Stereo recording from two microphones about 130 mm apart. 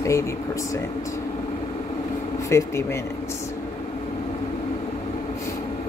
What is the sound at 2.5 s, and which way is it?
Speech, 20° left (ahead or behind).